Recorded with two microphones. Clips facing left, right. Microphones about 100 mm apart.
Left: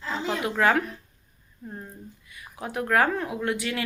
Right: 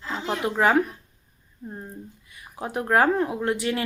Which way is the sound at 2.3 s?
30° right (ahead or behind).